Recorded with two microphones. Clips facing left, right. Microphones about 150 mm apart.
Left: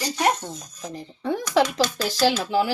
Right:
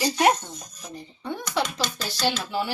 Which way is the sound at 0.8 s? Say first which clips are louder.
Left 6 dB; 90° left.